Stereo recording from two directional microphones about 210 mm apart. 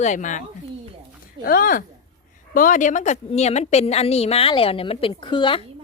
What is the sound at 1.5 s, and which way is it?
A woman's voice, 40° left (ahead or behind).